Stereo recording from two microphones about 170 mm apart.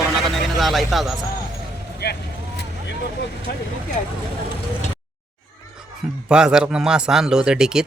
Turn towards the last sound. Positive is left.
turn(degrees=-5)  # may be behind; listen again after turning